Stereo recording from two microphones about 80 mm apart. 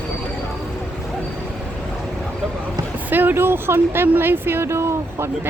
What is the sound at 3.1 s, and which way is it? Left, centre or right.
Speech, right.